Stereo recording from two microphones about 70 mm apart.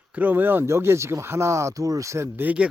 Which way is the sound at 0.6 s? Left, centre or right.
Right.